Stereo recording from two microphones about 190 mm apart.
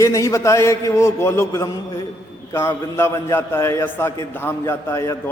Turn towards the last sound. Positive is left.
turn(degrees=15)  # may be behind; listen again after turning